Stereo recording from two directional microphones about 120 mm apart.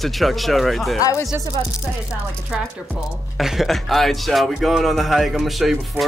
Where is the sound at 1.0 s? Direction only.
25° left (ahead or behind).